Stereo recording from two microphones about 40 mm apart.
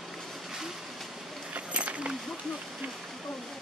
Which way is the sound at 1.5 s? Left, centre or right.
Right.